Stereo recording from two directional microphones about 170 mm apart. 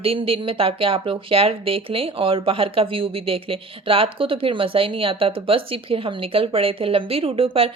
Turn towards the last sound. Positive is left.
turn(degrees=-35)  # may be behind; listen again after turning